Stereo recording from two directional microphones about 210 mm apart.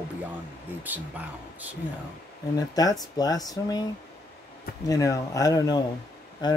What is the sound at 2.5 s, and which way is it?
Speech, 20° left (ahead or behind).